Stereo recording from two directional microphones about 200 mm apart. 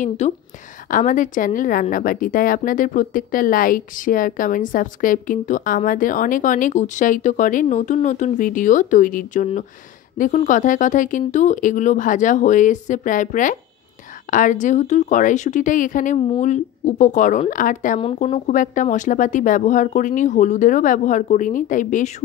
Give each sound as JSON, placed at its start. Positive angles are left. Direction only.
{"t": 0.8, "sound": "speech", "side_deg": 40}